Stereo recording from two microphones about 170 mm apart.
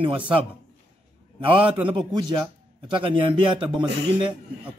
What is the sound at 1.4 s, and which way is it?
A man's voice, 30° right (ahead or behind).